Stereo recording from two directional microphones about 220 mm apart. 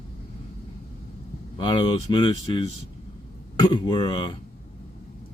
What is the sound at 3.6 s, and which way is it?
Speech, 20° left (ahead or behind).